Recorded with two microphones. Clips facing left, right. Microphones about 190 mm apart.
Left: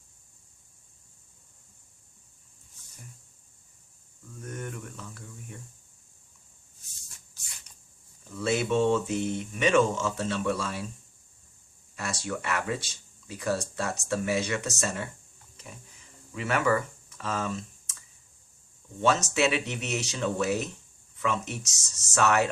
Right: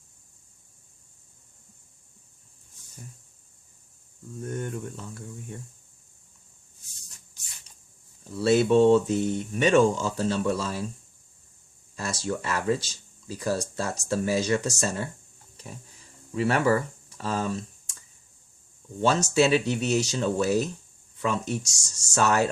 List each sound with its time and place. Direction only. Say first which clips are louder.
4.4 s speech: right 6 dB; 30° right (ahead or behind)
8.2 s speech: right 7 dB; 35° right (ahead or behind)
11.9 s speech: right 3 dB; 30° right (ahead or behind)
15.5 s a sound: right 4 dB; 35° right (ahead or behind)
19.0 s speech: right 3 dB; 30° right (ahead or behind)